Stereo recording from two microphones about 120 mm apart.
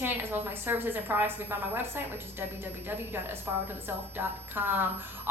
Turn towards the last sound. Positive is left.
turn(degrees=-15)  # may be behind; listen again after turning